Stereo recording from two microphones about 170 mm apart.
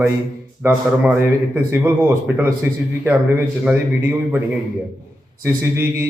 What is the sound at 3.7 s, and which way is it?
Speech, 10° right (ahead or behind).